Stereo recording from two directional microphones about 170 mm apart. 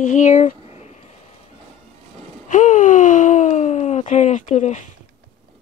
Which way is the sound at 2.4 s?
50° left (ahead or behind).